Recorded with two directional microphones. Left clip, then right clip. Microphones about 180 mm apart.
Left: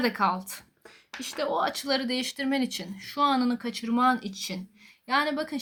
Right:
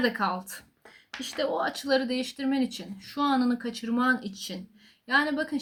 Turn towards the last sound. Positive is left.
turn(degrees=45)  # may be behind; listen again after turning